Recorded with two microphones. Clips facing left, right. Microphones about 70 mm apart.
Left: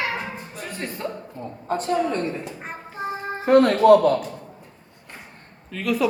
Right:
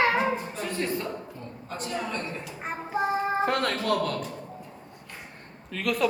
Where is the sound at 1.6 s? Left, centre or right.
Left.